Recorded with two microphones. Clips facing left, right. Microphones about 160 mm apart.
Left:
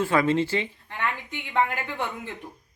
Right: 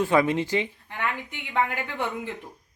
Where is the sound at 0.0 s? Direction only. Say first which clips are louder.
Even; 15° right (ahead or behind).